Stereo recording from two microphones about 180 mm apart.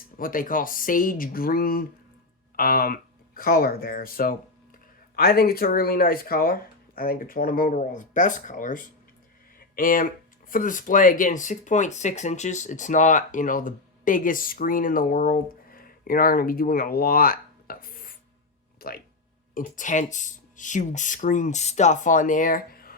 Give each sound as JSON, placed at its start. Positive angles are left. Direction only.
{"t": 0.2, "sound": "speech", "side_deg": 50}
{"t": 9.6, "sound": "a sound", "side_deg": 50}
{"t": 10.5, "sound": "speech", "side_deg": 45}
{"t": 19.5, "sound": "speech", "side_deg": 45}